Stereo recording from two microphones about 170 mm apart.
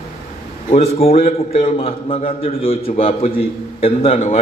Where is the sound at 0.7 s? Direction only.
40° left (ahead or behind).